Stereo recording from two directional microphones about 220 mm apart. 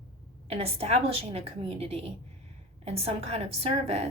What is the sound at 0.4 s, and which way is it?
A woman's voice, 25° right (ahead or behind).